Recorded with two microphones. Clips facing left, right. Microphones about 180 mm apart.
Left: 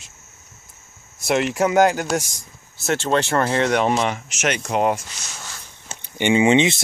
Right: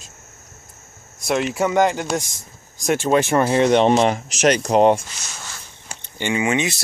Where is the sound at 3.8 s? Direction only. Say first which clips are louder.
Right 5 dB; 30° right (ahead or behind).